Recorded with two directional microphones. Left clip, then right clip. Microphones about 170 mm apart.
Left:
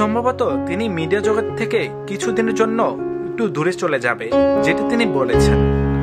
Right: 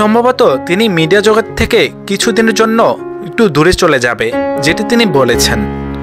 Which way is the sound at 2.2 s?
35° right (ahead or behind).